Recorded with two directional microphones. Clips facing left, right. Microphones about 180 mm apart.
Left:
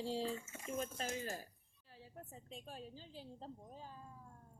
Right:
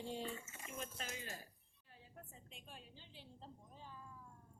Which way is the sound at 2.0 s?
35° left (ahead or behind).